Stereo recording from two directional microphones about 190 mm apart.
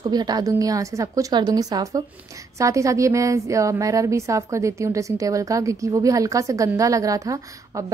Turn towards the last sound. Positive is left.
turn(degrees=-15)  # may be behind; listen again after turning